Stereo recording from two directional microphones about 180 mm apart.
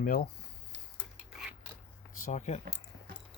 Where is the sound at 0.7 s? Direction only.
90° right.